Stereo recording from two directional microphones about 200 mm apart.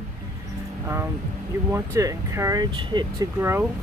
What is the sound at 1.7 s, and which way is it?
Speech, 15° right (ahead or behind).